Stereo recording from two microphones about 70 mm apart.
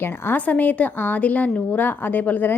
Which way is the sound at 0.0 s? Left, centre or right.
Left.